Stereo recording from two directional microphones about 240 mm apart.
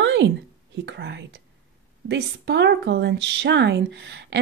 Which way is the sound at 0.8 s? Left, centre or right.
Right.